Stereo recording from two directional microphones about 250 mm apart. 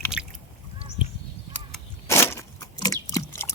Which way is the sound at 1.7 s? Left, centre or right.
Centre.